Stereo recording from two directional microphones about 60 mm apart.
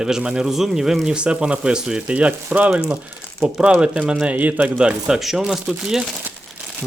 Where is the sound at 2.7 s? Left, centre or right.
Centre.